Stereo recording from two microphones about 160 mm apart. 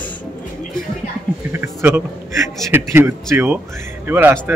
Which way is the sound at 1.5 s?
15° right (ahead or behind).